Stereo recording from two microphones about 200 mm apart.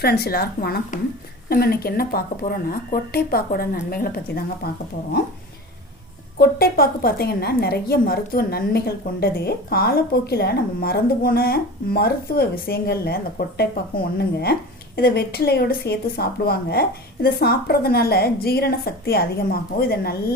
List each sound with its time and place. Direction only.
0.0 s a woman's voice: 50° left (ahead or behind)
6.4 s a woman's voice: 50° left (ahead or behind)